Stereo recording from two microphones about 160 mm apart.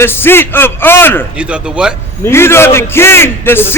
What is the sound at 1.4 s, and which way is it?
Speech, 5° right (ahead or behind).